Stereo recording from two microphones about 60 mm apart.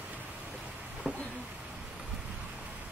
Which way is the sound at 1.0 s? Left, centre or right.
Centre.